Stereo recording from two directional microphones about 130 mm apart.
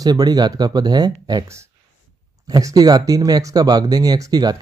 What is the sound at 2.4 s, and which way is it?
Speech, 30° right (ahead or behind).